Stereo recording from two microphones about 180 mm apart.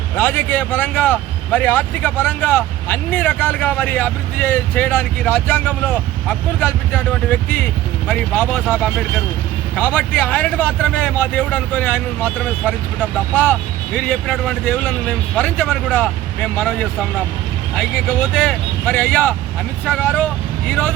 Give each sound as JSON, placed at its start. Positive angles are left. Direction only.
{"t": 0.2, "sound": "speech", "side_deg": 10}